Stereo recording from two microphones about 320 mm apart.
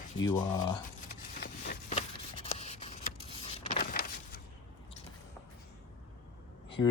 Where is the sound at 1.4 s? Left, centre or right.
Left.